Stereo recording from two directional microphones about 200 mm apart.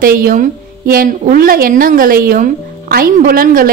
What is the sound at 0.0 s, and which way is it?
A woman's voice, 45° right (ahead or behind).